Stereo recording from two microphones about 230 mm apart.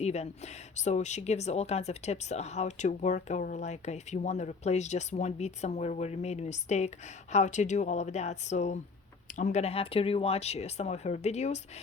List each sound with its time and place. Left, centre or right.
0.0 s speech: left